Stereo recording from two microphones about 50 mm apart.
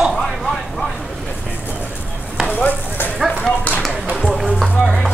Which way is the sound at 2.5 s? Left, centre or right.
Left.